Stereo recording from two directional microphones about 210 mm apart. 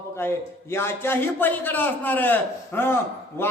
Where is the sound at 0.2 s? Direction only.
10° left (ahead or behind).